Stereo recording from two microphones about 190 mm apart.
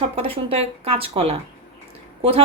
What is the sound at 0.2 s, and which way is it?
A woman's voice, 30° right (ahead or behind).